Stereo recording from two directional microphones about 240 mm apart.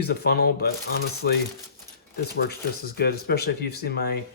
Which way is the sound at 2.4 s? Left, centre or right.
Left.